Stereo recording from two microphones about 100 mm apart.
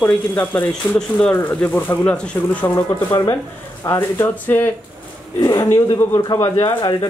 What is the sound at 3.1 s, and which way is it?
Speech, 35° left (ahead or behind).